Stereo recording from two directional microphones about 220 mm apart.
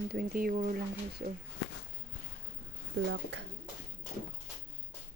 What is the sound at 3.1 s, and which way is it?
Speech, 55° right (ahead or behind).